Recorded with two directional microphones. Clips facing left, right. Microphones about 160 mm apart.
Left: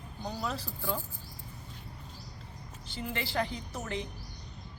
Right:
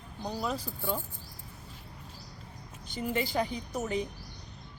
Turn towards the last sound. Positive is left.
turn(degrees=-10)  # may be behind; listen again after turning